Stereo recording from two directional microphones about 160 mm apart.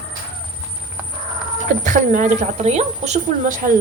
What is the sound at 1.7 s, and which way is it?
A woman's voice, 50° right (ahead or behind).